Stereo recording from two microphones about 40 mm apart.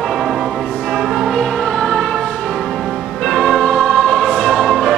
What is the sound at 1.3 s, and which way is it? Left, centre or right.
Music, centre.